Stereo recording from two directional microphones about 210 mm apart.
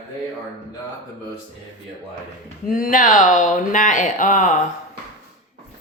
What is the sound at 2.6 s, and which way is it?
Speech, 40° left (ahead or behind).